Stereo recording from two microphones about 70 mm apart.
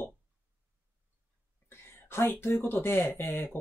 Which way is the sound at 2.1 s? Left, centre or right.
Left.